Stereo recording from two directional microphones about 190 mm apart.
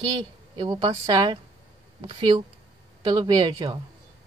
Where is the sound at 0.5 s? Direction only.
25° right (ahead or behind).